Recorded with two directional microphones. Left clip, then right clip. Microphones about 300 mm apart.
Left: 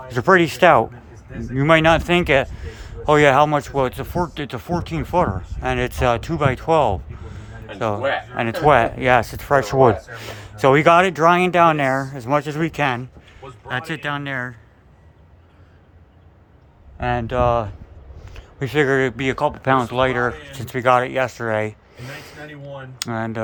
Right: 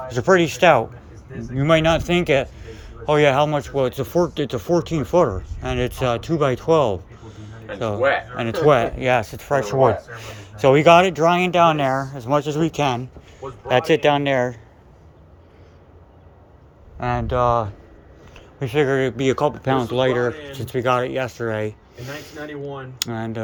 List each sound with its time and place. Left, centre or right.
0.1 s speech: centre
13.7 s speech: centre
17.0 s speech: centre